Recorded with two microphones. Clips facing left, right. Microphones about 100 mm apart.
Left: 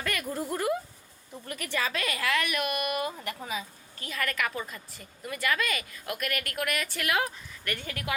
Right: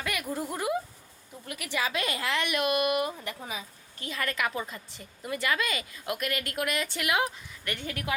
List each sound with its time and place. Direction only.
0.0 s a woman's voice: 10° right (ahead or behind)